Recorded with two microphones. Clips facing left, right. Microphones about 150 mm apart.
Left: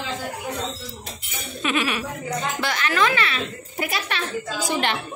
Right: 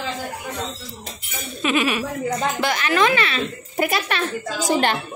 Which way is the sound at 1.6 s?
5° right (ahead or behind).